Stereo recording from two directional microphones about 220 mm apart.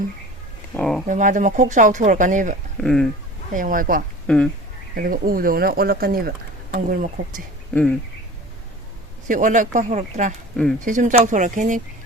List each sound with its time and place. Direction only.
0.7 s speech: 5° left (ahead or behind)
1.0 s speech: 35° right (ahead or behind)
2.8 s speech: centre (ahead or behind)
3.5 s speech: 40° right (ahead or behind)
7.7 s speech: 5° left (ahead or behind)
9.2 s speech: 35° right (ahead or behind)